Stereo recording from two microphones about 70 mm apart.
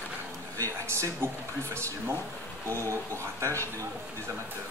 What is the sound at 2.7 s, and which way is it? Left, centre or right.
Speech, right.